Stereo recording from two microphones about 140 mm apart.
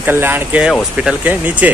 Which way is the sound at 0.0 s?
15° right (ahead or behind).